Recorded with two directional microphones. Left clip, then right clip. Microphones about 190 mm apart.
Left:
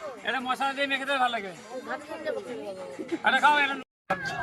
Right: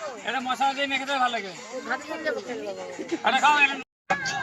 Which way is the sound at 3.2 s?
15° right (ahead or behind).